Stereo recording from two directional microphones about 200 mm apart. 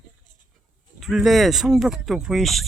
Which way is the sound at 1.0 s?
Centre (ahead or behind).